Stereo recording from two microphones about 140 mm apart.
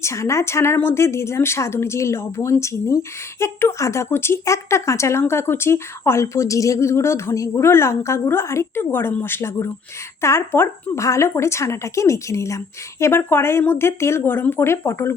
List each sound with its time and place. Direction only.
0.0 s a woman's voice: 20° left (ahead or behind)